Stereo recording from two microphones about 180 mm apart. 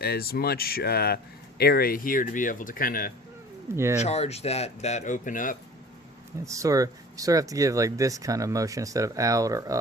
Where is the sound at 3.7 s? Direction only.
15° right (ahead or behind).